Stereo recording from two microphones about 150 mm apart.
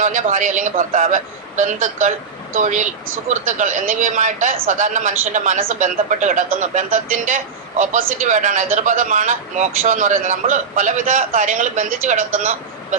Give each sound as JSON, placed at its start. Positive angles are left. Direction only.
{"t": 0.0, "sound": "speech", "side_deg": -55}